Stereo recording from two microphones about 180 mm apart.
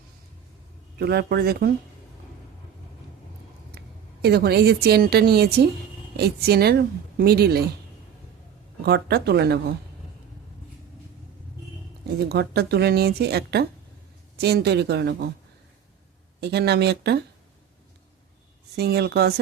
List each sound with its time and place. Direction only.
0.9 s speech: 65° right (ahead or behind)
3.8 s a woman's voice: 65° right (ahead or behind)
8.8 s speech: 65° right (ahead or behind)
12.0 s speech: 65° right (ahead or behind)
16.4 s speech: 65° right (ahead or behind)
18.8 s speech: 65° right (ahead or behind)